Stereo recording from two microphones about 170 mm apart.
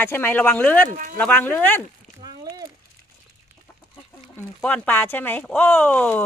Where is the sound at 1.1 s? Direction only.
10° left (ahead or behind).